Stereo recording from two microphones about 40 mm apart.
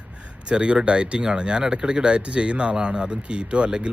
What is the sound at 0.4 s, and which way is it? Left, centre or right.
Speech, right.